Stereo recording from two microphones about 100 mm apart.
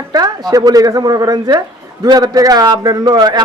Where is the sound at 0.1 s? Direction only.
40° right (ahead or behind).